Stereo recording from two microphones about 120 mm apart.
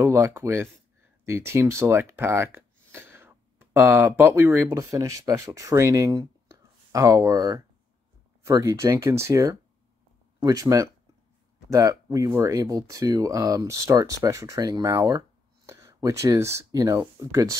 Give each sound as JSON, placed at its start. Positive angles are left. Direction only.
{"t": 0.0, "sound": "speech", "side_deg": -20}